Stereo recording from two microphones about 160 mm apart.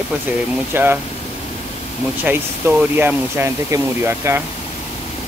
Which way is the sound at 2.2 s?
10° right (ahead or behind).